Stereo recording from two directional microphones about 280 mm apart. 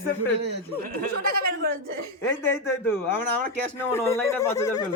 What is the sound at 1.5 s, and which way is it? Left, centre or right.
Speech, right.